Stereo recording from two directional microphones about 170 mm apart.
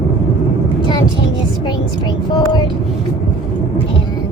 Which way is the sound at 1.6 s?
25° left (ahead or behind).